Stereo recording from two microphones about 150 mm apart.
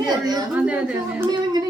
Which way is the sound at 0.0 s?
25° right (ahead or behind).